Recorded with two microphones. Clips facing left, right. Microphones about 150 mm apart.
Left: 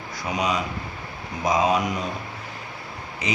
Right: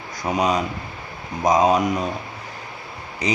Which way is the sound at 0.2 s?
45° right (ahead or behind).